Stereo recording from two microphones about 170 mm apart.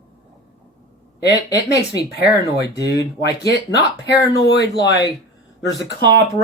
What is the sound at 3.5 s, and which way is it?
Speech, 80° left.